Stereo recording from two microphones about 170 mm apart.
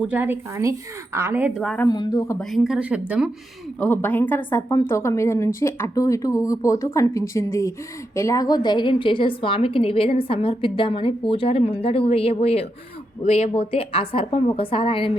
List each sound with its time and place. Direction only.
0.1 s speech: 10° right (ahead or behind)
1.6 s a woman's voice: 5° left (ahead or behind)
1.9 s speech: 25° left (ahead or behind)
2.4 s a woman's voice: centre (ahead or behind)
3.8 s a woman's voice: 10° left (ahead or behind); by 15.2 s 30° left (ahead or behind)